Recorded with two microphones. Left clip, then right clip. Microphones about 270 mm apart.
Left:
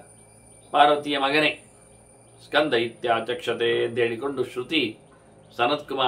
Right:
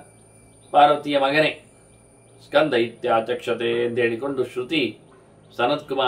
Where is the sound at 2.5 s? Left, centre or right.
Centre.